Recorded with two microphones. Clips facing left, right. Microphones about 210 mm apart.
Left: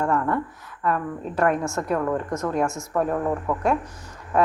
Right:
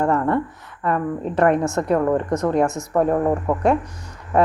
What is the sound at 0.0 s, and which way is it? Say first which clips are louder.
A woman's voice: right 4 dB; 35° right (ahead or behind).